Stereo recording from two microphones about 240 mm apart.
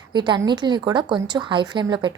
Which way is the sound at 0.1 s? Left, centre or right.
Centre.